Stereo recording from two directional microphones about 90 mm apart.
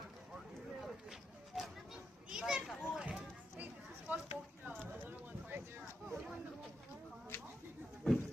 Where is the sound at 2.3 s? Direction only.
5° right (ahead or behind).